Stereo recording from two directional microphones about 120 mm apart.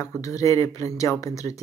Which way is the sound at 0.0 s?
25° left (ahead or behind).